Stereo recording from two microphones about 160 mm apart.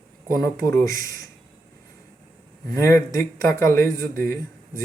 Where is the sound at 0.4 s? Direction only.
20° left (ahead or behind).